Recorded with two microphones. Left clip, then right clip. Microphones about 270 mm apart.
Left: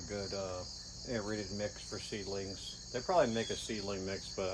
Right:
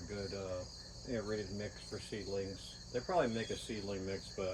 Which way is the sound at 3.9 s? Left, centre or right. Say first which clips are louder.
Left 2 dB; left.